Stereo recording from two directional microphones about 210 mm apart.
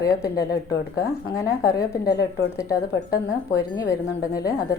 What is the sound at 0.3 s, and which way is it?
A woman's voice, 15° left (ahead or behind).